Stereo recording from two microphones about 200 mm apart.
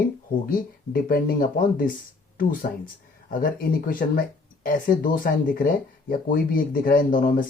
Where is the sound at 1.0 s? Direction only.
45° left (ahead or behind).